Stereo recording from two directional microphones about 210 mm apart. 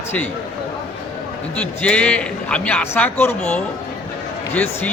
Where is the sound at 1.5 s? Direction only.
5° left (ahead or behind).